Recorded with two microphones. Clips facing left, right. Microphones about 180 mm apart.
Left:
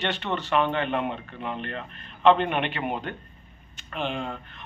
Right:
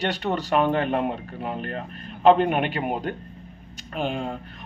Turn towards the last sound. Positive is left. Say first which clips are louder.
# right 3 dB
turn(degrees=-40)  # may be behind; listen again after turning